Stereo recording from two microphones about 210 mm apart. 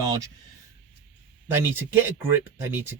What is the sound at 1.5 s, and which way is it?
A man's voice, 10° right (ahead or behind).